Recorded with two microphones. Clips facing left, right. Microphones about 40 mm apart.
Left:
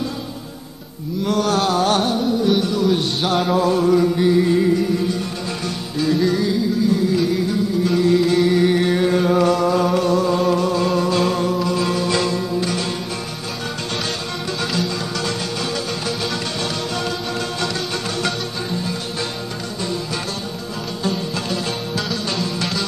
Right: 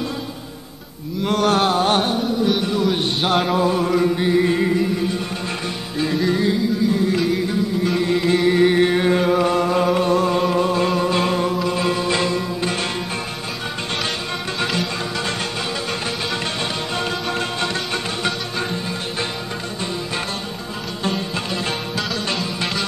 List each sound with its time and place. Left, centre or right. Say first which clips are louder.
1.2 s a sound: right 1 dB; right
2.7 s speech: left 1 dB; right
3.4 s music: left 2 dB; right
5.9 s music: left 2 dB; right
8.0 s music: left 3 dB; right
9.5 s a sound: left 1 dB; right
10.9 s music: left 1 dB; right
14.6 s music: even; right
21.0 s music: even; right
21.9 s music: even; centre